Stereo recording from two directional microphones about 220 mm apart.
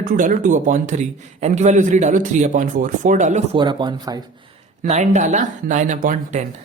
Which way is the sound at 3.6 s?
20° right (ahead or behind).